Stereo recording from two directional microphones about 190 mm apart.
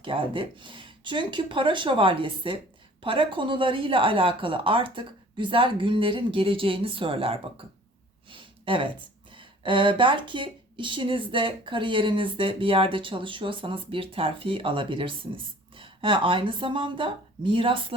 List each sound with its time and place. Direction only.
0.0 s speech: 25° right (ahead or behind)
8.3 s a sound: 25° right (ahead or behind)
9.3 s a woman's voice: 25° right (ahead or behind)